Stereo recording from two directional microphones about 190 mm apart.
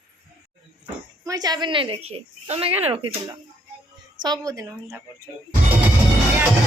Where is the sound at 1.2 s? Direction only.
20° right (ahead or behind).